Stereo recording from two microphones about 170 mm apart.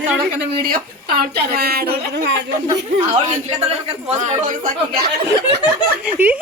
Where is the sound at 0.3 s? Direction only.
65° right (ahead or behind); by 2.4 s 80° right.